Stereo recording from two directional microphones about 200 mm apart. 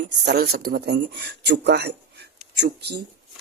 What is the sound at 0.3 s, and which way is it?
Speech, 50° right (ahead or behind).